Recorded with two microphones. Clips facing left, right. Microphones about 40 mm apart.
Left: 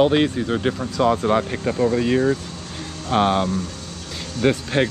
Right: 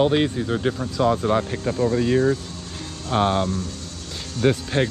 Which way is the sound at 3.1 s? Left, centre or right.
Left.